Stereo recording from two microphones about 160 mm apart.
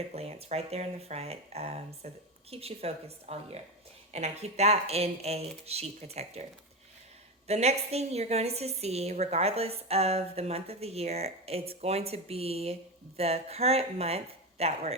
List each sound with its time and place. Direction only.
0.1 s a woman's voice: 40° right (ahead or behind)